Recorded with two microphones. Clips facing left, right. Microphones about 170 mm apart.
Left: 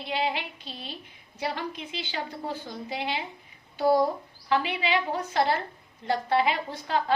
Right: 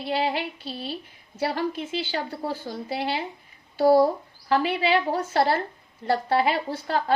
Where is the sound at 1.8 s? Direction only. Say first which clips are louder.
Right 6 dB; 40° right (ahead or behind).